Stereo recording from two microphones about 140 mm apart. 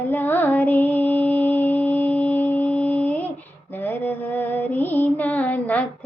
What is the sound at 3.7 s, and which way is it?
Female singing, 15° left (ahead or behind).